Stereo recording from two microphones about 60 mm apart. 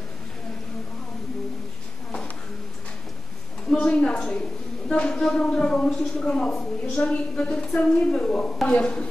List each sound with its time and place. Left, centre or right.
3.8 s a woman's voice: centre